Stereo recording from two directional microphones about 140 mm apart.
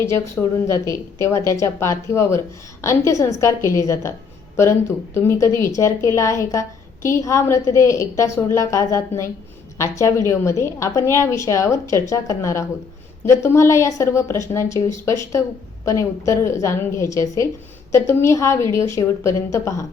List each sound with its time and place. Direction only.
0.4 s a woman's voice: 5° left (ahead or behind)
0.9 s a woman's voice: 20° left (ahead or behind)
5.1 s a woman's voice: 15° left (ahead or behind)